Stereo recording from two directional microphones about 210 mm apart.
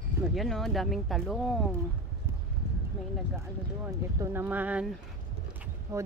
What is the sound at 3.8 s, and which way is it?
Speech, 10° right (ahead or behind).